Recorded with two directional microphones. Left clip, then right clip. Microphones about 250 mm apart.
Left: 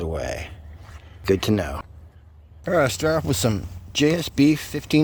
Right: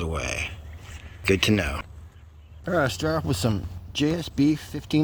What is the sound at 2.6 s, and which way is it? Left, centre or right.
Speech, left.